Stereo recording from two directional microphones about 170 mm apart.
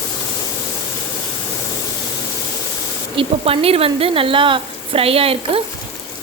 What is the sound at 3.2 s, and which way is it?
A woman's voice, 35° right (ahead or behind).